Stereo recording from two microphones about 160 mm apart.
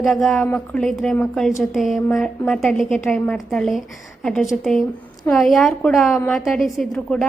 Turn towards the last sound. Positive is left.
turn(degrees=0)  # may be behind; listen again after turning